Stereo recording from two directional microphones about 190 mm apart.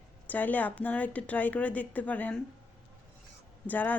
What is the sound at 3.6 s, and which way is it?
Speech, 10° left (ahead or behind).